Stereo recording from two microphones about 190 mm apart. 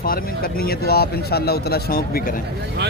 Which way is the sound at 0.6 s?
55° left (ahead or behind).